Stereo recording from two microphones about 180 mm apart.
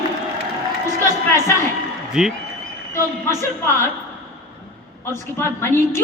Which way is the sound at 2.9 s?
15° left (ahead or behind).